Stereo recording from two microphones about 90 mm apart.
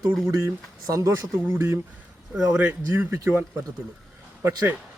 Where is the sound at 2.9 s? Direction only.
30° right (ahead or behind).